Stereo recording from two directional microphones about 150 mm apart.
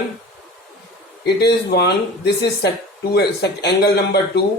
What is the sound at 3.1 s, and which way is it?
Speech, 90° left.